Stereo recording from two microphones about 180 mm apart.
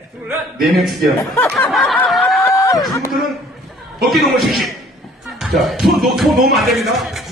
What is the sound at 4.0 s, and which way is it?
A man's voice, centre (ahead or behind).